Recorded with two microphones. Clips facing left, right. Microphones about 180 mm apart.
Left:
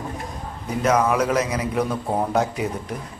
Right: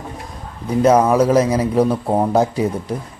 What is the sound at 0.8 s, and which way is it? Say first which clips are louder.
A man's voice: right 6 dB; 30° right (ahead or behind).